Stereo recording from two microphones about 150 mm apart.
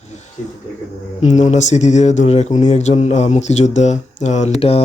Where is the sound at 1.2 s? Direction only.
55° left (ahead or behind).